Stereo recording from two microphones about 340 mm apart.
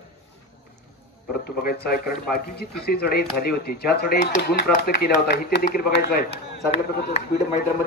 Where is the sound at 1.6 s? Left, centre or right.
Left.